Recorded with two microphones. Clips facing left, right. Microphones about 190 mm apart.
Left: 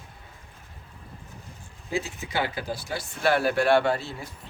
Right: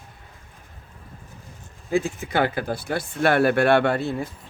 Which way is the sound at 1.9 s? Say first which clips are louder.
Right 7 dB; 50° right (ahead or behind).